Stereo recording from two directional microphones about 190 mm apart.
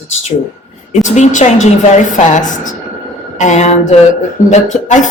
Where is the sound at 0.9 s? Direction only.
40° left (ahead or behind).